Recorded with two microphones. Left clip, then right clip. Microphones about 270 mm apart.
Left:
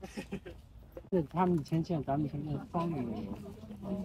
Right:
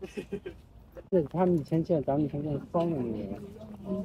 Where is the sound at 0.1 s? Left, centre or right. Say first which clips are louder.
Right 5 dB; centre.